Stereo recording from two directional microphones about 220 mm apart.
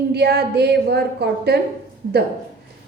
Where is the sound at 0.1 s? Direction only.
45° right (ahead or behind).